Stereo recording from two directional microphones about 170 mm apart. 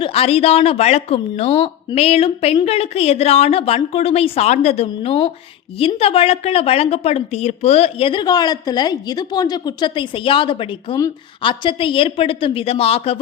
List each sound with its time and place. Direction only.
0.0 s a woman's voice: 35° left (ahead or behind)